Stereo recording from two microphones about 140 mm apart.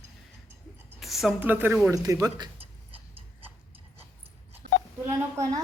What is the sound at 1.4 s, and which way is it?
Speech, 15° right (ahead or behind).